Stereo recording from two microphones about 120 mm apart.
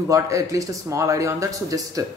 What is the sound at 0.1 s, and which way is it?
Speech, 25° right (ahead or behind).